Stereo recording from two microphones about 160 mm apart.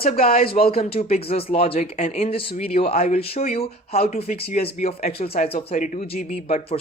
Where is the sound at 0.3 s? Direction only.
40° left (ahead or behind).